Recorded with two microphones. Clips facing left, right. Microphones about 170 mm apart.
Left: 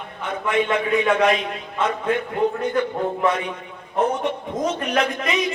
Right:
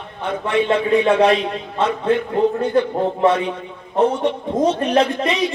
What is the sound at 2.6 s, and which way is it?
Speech, 30° right (ahead or behind).